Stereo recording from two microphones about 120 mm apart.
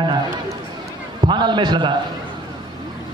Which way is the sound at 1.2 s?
40° right (ahead or behind).